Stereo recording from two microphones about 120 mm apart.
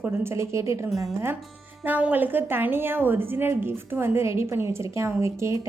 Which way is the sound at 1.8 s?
15° right (ahead or behind).